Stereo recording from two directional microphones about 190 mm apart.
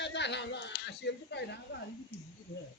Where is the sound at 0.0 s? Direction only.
65° left (ahead or behind).